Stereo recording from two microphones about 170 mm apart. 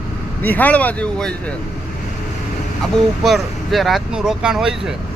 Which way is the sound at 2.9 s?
Centre (ahead or behind).